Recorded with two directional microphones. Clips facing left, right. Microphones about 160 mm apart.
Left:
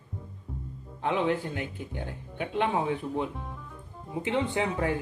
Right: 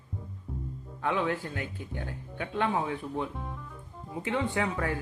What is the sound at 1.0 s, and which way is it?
Speech, 25° left (ahead or behind).